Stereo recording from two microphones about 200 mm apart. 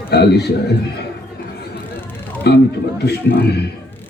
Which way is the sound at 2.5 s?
55° left (ahead or behind).